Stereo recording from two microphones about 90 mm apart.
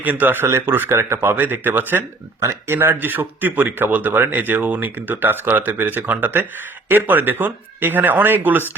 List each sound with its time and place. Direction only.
0.0 s speech: 20° right (ahead or behind)